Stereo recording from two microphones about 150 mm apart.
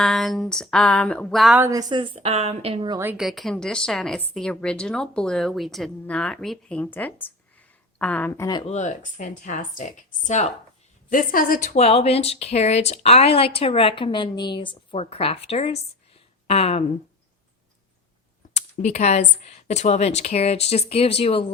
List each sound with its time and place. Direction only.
0.0 s a woman's voice: centre (ahead or behind)
1.5 s a woman's voice: 20° right (ahead or behind); by 2.9 s 40° right (ahead or behind)
3.2 s a woman's voice: centre (ahead or behind); by 8.6 s 25° left (ahead or behind)
8.6 s speech: 50° left (ahead or behind)
11.1 s a woman's voice: 70° left (ahead or behind)
11.7 s speech: 45° left (ahead or behind)
18.5 s speech: 50° left (ahead or behind)